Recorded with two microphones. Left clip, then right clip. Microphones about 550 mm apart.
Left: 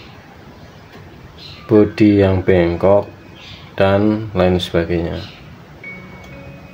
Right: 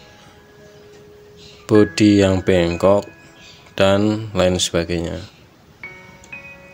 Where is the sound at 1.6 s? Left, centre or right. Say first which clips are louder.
Left 2 dB; right.